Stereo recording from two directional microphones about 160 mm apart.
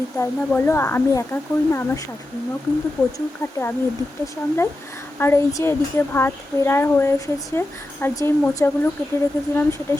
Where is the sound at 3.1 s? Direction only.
15° left (ahead or behind).